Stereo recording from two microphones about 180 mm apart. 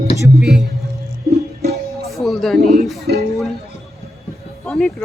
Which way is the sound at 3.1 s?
65° right (ahead or behind).